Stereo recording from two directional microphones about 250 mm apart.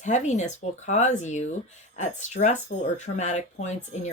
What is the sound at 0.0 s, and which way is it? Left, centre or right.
Speech, left.